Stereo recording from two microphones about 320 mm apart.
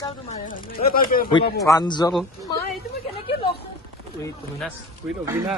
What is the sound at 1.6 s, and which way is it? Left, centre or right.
Speech, centre.